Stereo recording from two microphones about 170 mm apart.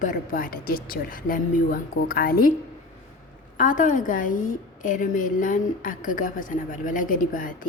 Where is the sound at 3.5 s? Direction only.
50° left (ahead or behind).